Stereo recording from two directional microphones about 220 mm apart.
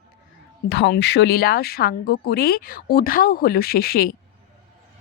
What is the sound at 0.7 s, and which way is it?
Speech, 50° left (ahead or behind).